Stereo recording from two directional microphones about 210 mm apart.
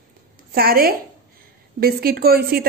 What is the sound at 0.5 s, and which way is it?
Speech, 45° right (ahead or behind).